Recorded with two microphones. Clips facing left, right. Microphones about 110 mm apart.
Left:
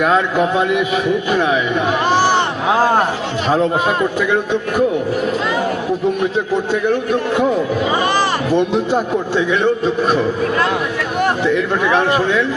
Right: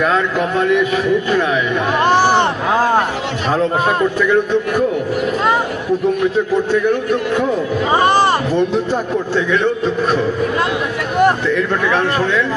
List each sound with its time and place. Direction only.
0.0 s a man's voice: 10° left (ahead or behind)
7.9 s speech: 35° right (ahead or behind)
8.5 s a man's voice: 10° left (ahead or behind)
11.4 s a man's voice: 15° left (ahead or behind)